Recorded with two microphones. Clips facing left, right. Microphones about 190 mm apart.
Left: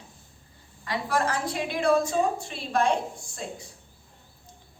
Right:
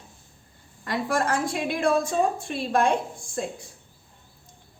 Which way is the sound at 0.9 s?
50° right (ahead or behind).